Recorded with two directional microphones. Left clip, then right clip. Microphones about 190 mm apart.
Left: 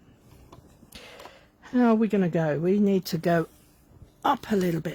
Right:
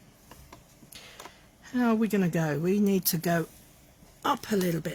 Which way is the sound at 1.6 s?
45° left (ahead or behind).